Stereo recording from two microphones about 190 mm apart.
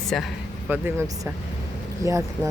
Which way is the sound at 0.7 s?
10° right (ahead or behind).